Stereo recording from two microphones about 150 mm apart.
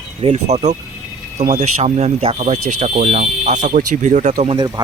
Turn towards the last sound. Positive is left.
turn(degrees=-30)  # may be behind; listen again after turning